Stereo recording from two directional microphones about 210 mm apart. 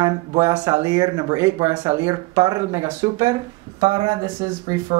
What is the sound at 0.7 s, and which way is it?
Speech, 30° right (ahead or behind).